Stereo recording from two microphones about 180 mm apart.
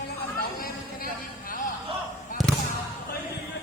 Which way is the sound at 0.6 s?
50° left (ahead or behind).